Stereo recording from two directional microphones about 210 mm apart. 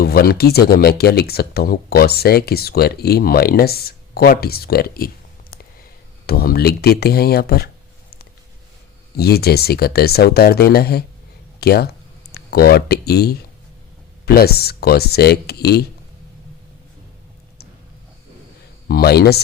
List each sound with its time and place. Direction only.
0.0 s speech: 45° left (ahead or behind)
9.1 s speech: 50° left (ahead or behind)
11.6 s a sound: 50° left (ahead or behind)
14.3 s speech: 50° left (ahead or behind)
18.9 s speech: 50° left (ahead or behind)